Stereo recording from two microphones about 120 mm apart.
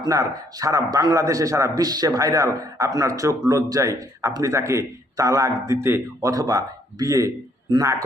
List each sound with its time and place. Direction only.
0.0 s a man's voice: 30° right (ahead or behind)